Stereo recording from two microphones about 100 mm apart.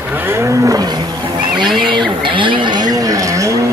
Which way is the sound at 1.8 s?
55° right (ahead or behind).